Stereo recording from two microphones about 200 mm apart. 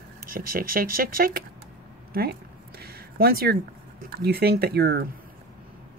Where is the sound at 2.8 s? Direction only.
50° right (ahead or behind).